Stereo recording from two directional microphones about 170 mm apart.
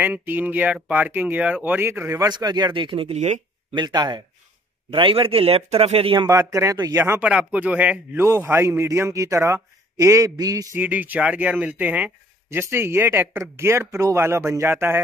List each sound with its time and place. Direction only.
0.0 s speech: 10° right (ahead or behind); by 3.3 s 40° right (ahead or behind)
3.7 s speech: 25° right (ahead or behind)
6.2 s speech: 20° right (ahead or behind)